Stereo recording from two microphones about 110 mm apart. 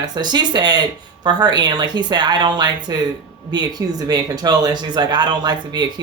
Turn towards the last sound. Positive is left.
turn(degrees=-40)  # may be behind; listen again after turning